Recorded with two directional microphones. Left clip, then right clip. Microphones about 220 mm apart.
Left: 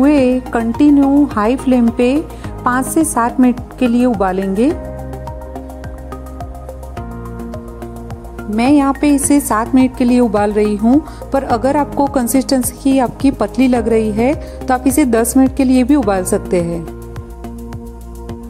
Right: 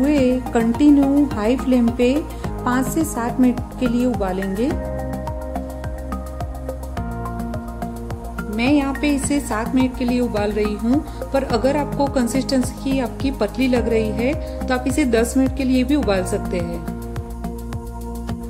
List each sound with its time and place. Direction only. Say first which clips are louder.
0.0 s music: left 6 dB; 35° left (ahead or behind)
0.7 s speech: left 5 dB; 35° left (ahead or behind)
8.5 s speech: left 7 dB; 35° left (ahead or behind)